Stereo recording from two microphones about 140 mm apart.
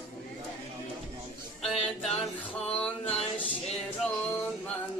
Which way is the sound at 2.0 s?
5° left (ahead or behind).